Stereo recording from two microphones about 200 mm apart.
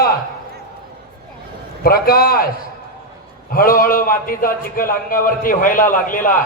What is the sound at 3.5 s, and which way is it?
A man's voice, 45° left (ahead or behind).